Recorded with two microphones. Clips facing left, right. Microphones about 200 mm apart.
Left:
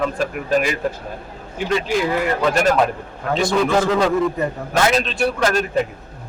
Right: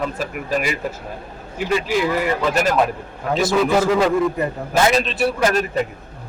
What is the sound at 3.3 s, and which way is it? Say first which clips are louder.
A man's voice: even; 5° right (ahead or behind).